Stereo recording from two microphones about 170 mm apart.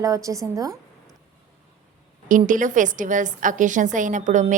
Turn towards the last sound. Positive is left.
turn(degrees=-45)  # may be behind; listen again after turning